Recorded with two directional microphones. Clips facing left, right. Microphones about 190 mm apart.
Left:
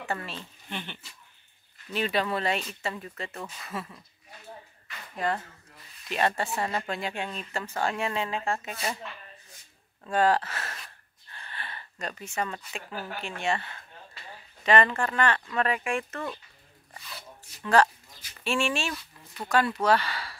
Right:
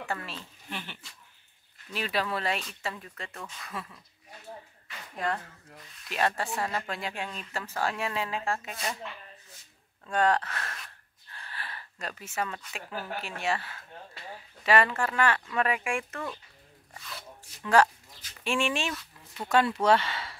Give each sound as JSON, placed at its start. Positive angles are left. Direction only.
{"t": 0.0, "sound": "speech", "side_deg": 0}
{"t": 5.1, "sound": "speech", "side_deg": 0}
{"t": 10.0, "sound": "speech", "side_deg": 5}
{"t": 11.3, "sound": "a sound", "side_deg": 0}
{"t": 13.2, "sound": "speech", "side_deg": -5}
{"t": 16.9, "sound": "rub", "side_deg": 5}
{"t": 18.4, "sound": "speech", "side_deg": -15}